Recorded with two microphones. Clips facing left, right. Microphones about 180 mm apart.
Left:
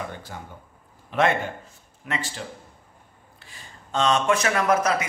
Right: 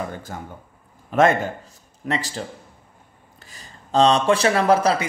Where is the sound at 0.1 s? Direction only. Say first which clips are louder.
Right 4 dB; 45° right (ahead or behind).